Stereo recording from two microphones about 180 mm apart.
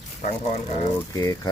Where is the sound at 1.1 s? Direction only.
20° left (ahead or behind).